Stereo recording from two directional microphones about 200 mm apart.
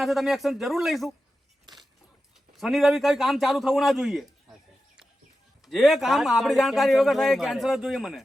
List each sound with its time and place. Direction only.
0.0 s a man's voice: centre (ahead or behind)
1.7 s keys jangling: 20° right (ahead or behind)
2.6 s a man's voice: centre (ahead or behind)
5.6 s a man's voice: centre (ahead or behind)